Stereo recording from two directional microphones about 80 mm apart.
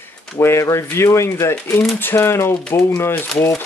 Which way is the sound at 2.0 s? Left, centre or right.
Left.